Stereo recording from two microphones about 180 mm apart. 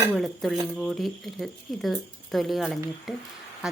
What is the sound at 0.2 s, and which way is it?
Speech, centre (ahead or behind).